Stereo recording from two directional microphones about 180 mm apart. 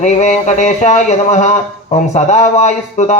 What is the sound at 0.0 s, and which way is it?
Speech, 40° left (ahead or behind).